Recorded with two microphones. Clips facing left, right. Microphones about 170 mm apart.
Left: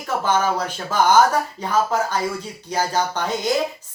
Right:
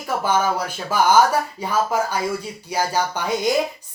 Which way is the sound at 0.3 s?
10° right (ahead or behind).